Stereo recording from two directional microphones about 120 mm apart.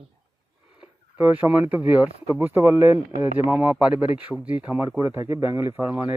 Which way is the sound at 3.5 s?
10° right (ahead or behind).